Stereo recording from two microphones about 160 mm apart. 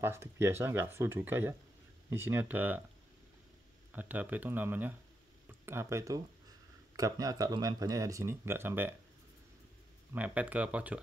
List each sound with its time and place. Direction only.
0.0 s speech: 15° right (ahead or behind)
3.9 s speech: 10° right (ahead or behind)
10.1 s speech: 10° right (ahead or behind)